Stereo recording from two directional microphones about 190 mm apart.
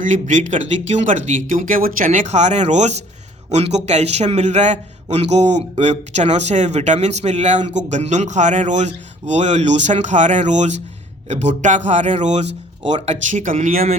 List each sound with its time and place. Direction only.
0.0 s a man's voice: 40° right (ahead or behind)